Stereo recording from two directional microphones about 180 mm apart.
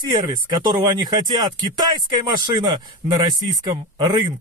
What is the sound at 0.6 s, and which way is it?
Speech, 25° right (ahead or behind).